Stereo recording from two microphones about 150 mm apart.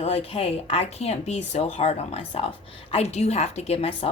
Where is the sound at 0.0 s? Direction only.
40° left (ahead or behind).